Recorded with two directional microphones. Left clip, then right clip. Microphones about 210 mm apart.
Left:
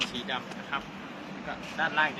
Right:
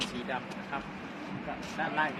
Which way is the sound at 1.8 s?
20° right (ahead or behind).